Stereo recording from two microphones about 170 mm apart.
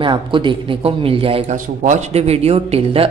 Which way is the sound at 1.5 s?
45° right (ahead or behind).